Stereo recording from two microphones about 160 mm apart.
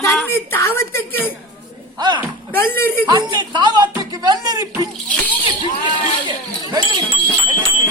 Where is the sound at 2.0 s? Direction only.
30° right (ahead or behind).